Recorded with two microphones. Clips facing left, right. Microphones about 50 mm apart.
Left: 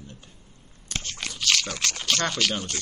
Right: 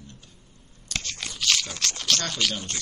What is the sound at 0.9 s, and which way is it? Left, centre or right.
Biting, left.